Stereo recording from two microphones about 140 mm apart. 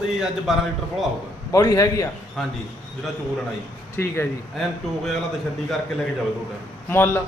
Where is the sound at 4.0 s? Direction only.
15° left (ahead or behind).